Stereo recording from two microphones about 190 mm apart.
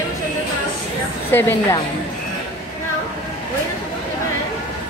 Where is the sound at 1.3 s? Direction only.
10° left (ahead or behind).